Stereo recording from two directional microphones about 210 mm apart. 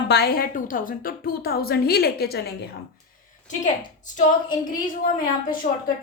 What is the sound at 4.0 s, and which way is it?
Speech, 35° left (ahead or behind).